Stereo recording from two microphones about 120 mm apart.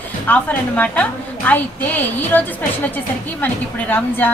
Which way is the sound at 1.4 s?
15° left (ahead or behind).